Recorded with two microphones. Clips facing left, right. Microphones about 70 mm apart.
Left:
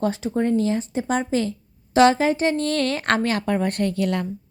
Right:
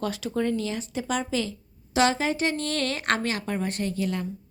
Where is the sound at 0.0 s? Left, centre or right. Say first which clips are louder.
Left 5 dB; left.